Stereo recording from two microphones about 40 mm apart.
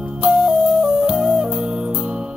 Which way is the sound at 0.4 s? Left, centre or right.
Right.